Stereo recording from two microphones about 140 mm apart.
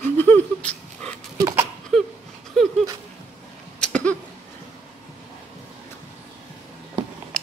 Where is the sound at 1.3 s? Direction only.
25° right (ahead or behind).